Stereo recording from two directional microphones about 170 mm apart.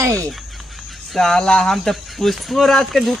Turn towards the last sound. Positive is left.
turn(degrees=0)  # may be behind; listen again after turning